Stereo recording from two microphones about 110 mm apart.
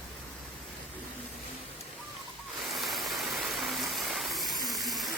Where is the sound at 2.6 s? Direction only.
Centre (ahead or behind).